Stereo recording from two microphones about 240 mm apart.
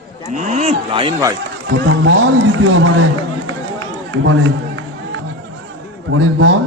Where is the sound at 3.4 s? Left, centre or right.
Right.